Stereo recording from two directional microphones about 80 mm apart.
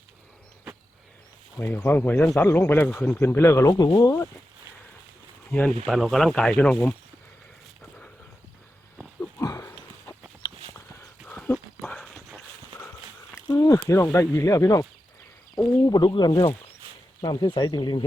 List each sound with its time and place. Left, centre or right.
1.5 s speech: left
3.2 s speech: left
3.7 s speech: left
5.5 s speech: centre
5.8 s speech: centre
9.4 s a sound: left
11.3 s horse: centre
11.8 s a sound: centre
13.5 s snake: left
13.8 s speech: left
15.9 s speech: left